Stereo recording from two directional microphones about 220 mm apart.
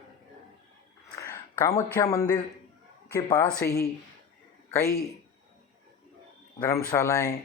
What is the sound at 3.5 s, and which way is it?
Speech, 45° left (ahead or behind).